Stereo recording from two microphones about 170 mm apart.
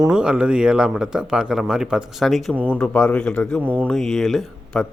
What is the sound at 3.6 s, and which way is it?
Speech, 10° right (ahead or behind).